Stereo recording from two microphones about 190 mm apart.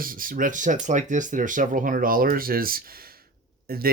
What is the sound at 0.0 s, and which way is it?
Speech, 45° right (ahead or behind).